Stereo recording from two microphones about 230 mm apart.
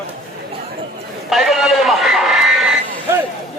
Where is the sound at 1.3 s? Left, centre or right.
Centre.